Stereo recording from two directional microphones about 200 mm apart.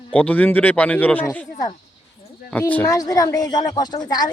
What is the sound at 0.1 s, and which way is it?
Speech, 5° left (ahead or behind).